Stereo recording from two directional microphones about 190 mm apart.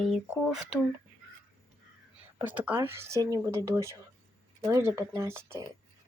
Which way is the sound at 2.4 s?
10° right (ahead or behind).